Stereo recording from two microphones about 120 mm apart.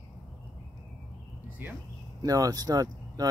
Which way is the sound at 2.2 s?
30° right (ahead or behind).